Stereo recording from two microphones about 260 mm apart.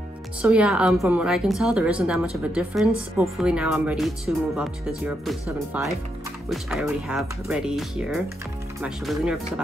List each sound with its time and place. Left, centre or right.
0.4 s a woman's voice: centre